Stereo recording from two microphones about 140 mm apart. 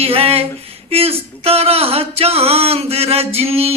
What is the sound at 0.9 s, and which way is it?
Speech, 45° right (ahead or behind).